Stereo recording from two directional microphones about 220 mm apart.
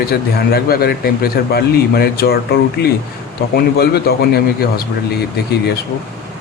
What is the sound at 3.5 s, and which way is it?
Speech, 45° left (ahead or behind).